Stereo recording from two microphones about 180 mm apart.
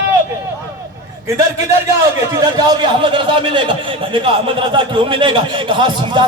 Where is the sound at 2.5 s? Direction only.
25° right (ahead or behind).